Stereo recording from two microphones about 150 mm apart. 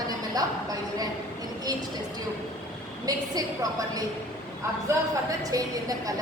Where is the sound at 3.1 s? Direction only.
25° right (ahead or behind).